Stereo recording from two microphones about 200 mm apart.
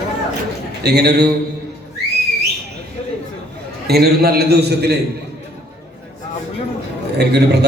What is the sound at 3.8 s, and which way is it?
A man's voice, 50° right (ahead or behind).